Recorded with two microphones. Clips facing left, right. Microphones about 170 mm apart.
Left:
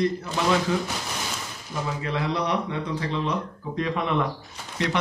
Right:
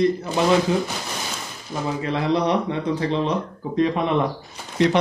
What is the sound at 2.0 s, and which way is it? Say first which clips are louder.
Speech: right 6 dB; 25° right (ahead or behind).